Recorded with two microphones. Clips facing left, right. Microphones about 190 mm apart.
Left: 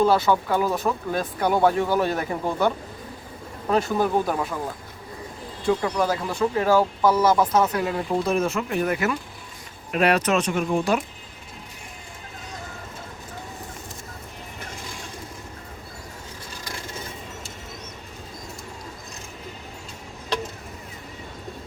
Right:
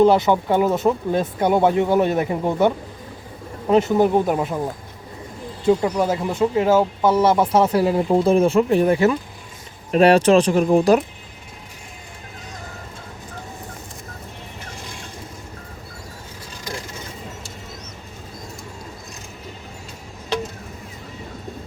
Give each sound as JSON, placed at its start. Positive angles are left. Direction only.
{"t": 0.0, "sound": "speech", "side_deg": -20}
{"t": 5.6, "sound": "speech", "side_deg": -25}